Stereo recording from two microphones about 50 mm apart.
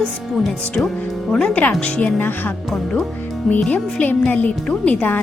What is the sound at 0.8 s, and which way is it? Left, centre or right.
Music, left.